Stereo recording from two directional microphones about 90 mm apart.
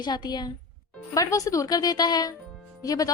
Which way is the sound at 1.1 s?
40° left (ahead or behind).